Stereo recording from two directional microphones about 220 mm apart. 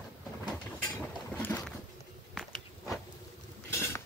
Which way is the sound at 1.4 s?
10° left (ahead or behind).